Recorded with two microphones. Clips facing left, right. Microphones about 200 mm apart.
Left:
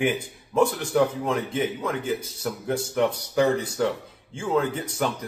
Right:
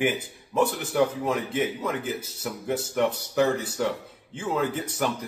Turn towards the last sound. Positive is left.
turn(degrees=-5)  # may be behind; listen again after turning